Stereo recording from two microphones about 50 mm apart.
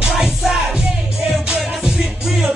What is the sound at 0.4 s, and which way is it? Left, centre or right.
Music, centre.